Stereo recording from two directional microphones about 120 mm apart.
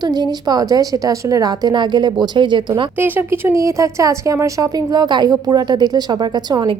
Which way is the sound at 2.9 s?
15° right (ahead or behind).